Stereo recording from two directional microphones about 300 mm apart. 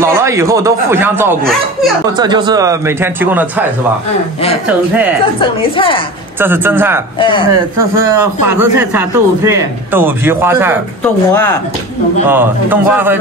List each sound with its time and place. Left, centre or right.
0.0 s a man's voice: centre
4.6 s speech: centre
5.4 s a woman's voice: centre
6.4 s a man's voice: centre
7.2 s a woman's voice: centre
8.0 s a man's voice: centre
12.3 s a man's voice: centre